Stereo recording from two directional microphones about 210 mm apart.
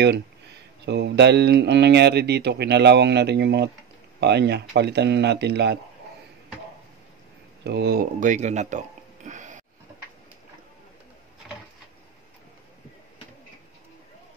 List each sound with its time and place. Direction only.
0.8 s speech: 55° right (ahead or behind)
7.6 s speech: 50° right (ahead or behind); by 9.6 s 35° right (ahead or behind)